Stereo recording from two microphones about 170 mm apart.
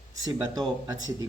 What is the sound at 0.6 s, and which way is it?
Speech, 25° right (ahead or behind).